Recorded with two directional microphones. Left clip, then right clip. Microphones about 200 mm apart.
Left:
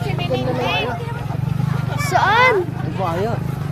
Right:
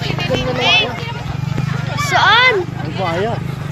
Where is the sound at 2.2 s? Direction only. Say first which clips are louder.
Right 3 dB; 10° left (ahead or behind).